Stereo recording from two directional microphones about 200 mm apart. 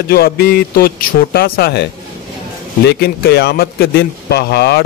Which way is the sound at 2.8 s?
55° left (ahead or behind).